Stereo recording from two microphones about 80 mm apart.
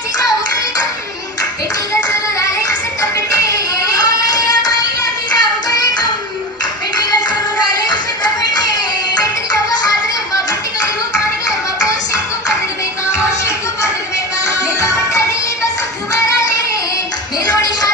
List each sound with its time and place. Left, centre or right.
3.0 s a sound: left
7.9 s music: left
14.4 s music: left